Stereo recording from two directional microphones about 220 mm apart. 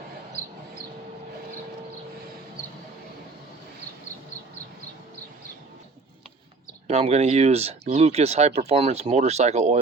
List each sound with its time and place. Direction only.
6.8 s speech: 30° right (ahead or behind)